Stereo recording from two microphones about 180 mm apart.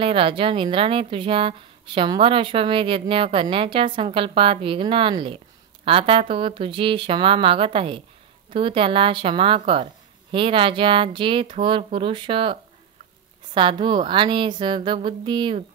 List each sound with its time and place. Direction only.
0.0 s a woman's voice: 30° right (ahead or behind)
13.6 s a woman's voice: 25° right (ahead or behind)